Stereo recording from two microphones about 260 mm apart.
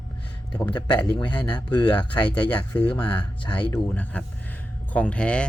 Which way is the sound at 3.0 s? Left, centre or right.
Centre.